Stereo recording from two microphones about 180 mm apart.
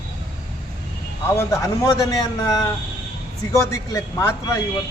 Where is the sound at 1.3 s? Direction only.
15° left (ahead or behind).